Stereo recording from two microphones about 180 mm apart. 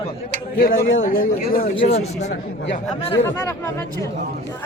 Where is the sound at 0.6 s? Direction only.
55° left (ahead or behind).